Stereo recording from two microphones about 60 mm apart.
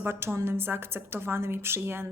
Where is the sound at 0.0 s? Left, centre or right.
Right.